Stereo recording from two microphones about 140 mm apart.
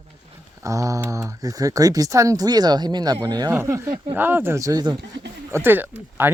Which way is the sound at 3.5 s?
15° right (ahead or behind).